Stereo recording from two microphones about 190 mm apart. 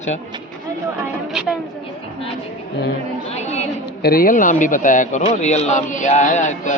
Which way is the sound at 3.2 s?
35° left (ahead or behind).